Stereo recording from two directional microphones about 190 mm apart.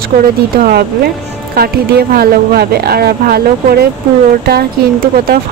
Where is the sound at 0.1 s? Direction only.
45° right (ahead or behind).